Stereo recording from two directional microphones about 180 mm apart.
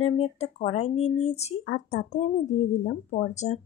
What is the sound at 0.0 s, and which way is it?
Speech, 35° left (ahead or behind).